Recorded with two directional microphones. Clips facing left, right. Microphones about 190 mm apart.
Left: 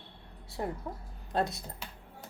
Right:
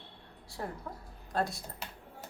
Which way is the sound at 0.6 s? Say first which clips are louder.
Left 4 dB; 20° left (ahead or behind).